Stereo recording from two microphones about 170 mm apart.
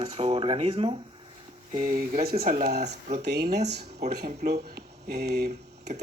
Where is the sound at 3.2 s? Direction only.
75° right (ahead or behind).